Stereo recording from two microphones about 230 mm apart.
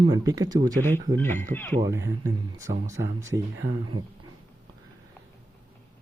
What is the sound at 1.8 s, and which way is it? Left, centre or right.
Speech, centre.